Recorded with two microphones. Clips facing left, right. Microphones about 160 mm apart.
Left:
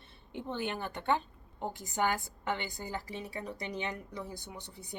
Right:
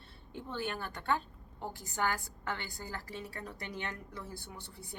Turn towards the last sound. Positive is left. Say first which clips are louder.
# left 2 dB
turn(degrees=20)  # may be behind; listen again after turning